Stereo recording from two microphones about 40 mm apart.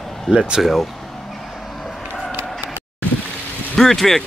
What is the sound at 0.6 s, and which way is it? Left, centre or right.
Speech, centre.